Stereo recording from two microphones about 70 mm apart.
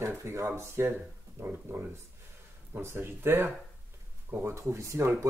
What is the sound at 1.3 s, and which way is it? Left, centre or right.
Speech, right.